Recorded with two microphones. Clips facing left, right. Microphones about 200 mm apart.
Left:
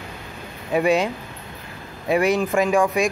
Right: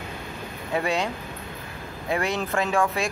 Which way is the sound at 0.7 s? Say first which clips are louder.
Left 7 dB; 20° left (ahead or behind).